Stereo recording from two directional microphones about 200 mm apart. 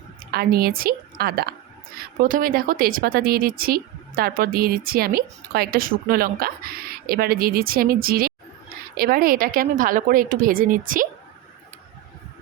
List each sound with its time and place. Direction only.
0.3 s speech: 50° right (ahead or behind)